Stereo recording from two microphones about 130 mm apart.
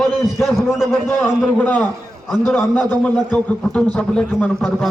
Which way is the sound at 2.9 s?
15° left (ahead or behind).